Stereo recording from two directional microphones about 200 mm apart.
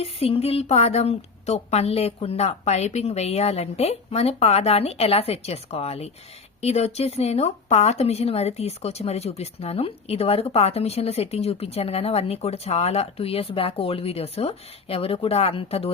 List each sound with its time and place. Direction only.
0.0 s a woman's voice: 30° left (ahead or behind)